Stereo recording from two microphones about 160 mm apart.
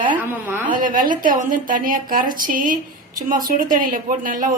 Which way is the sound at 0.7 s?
60° right (ahead or behind).